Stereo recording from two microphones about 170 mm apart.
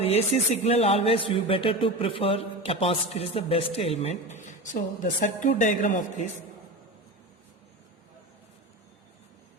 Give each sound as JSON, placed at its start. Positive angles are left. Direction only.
{"t": 0.0, "sound": "speech", "side_deg": 40}